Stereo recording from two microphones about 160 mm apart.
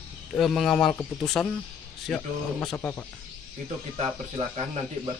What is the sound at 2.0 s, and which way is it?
Speech, 5° left (ahead or behind).